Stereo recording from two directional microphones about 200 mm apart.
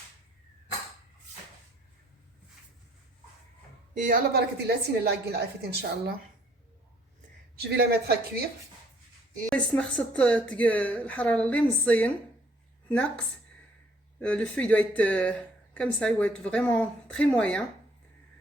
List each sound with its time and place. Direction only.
3.9 s a woman's voice: 40° right (ahead or behind)
7.6 s a woman's voice: 55° right (ahead or behind)
9.5 s speech: 5° left (ahead or behind)